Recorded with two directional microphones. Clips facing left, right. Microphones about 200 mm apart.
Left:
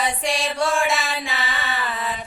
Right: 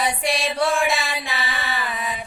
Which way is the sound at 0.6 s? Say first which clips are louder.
Even; 35° right (ahead or behind).